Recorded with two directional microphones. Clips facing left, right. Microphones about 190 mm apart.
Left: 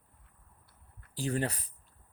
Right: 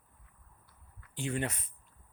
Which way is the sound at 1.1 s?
35° left (ahead or behind).